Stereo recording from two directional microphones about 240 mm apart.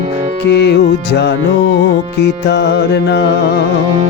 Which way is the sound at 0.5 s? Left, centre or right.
Left.